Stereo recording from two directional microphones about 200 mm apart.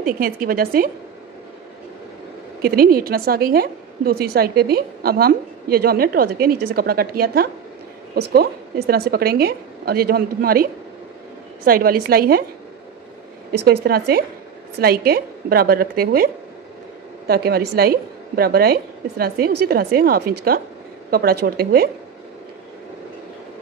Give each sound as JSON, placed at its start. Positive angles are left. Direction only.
{"t": 0.0, "sound": "a woman's voice", "side_deg": -45}
{"t": 2.6, "sound": "a woman's voice", "side_deg": -50}
{"t": 13.5, "sound": "a woman's voice", "side_deg": -50}
{"t": 17.3, "sound": "a woman's voice", "side_deg": -50}